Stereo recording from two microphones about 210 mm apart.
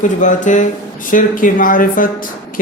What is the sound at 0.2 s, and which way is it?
Speech, 35° left (ahead or behind).